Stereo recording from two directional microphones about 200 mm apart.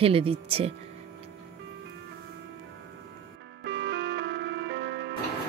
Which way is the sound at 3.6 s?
60° right (ahead or behind).